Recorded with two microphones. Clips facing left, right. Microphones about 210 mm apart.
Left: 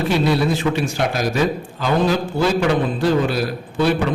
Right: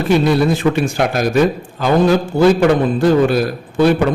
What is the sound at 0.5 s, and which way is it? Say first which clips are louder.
A man's voice: right 4 dB; 50° right (ahead or behind).